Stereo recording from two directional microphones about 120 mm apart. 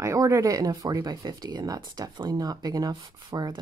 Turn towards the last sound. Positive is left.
turn(degrees=-35)  # may be behind; listen again after turning